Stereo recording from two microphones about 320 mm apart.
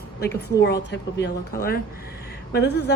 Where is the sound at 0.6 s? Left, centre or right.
Left.